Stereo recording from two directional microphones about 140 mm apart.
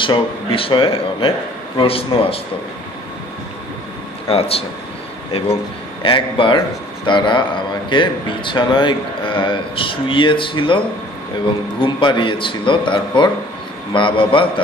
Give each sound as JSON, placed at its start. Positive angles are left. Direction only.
{"t": 0.0, "sound": "speech", "side_deg": 40}
{"t": 4.3, "sound": "a man's voice", "side_deg": 45}
{"t": 6.0, "sound": "speech", "side_deg": 35}